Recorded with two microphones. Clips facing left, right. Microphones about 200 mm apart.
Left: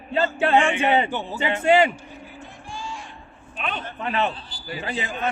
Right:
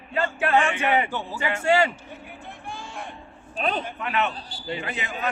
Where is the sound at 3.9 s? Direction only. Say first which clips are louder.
Left 2 dB; 35° left (ahead or behind).